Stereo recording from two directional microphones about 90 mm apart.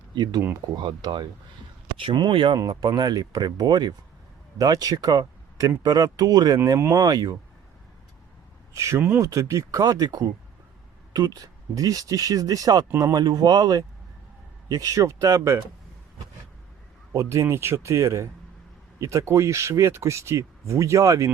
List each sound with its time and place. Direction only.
0.1 s speech: 50° right (ahead or behind)
2.6 s speech: 45° right (ahead or behind)
8.7 s speech: 35° right (ahead or behind)
9.0 s speech: 25° right (ahead or behind)
9.2 s speech: 35° right (ahead or behind)
17.1 s speech: 35° right (ahead or behind)